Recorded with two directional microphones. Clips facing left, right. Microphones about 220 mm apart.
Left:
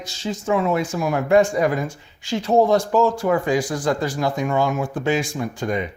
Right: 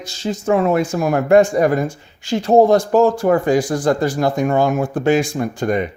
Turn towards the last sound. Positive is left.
turn(degrees=-55)  # may be behind; listen again after turning